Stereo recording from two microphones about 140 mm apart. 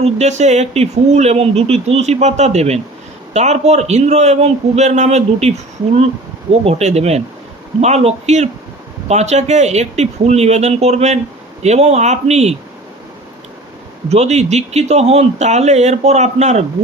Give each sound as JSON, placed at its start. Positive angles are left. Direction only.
{"t": 0.0, "sound": "speech", "side_deg": -55}
{"t": 14.1, "sound": "speech", "side_deg": -50}